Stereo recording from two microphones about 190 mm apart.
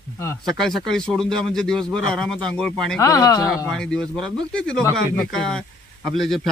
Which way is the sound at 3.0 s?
20° left (ahead or behind).